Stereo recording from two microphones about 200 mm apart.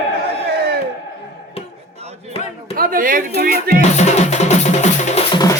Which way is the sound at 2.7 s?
45° right (ahead or behind).